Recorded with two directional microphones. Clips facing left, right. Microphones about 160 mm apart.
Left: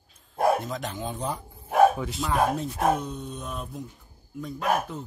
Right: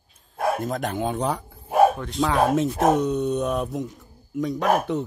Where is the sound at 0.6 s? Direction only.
55° right (ahead or behind); by 1.4 s 70° right (ahead or behind).